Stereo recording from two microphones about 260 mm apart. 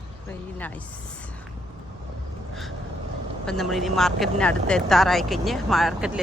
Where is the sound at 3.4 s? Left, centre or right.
Centre.